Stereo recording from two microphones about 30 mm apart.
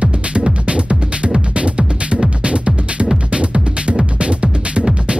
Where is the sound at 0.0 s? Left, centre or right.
Right.